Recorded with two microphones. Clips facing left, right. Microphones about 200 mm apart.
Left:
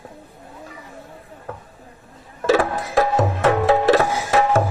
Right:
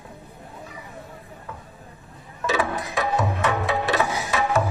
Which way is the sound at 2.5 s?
45° left (ahead or behind).